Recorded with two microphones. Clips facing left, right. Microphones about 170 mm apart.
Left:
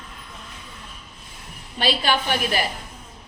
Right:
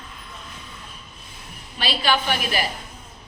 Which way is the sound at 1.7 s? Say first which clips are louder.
Left 3 dB; 50° left (ahead or behind).